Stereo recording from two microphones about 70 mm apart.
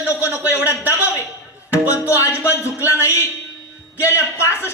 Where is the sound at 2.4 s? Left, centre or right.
Left.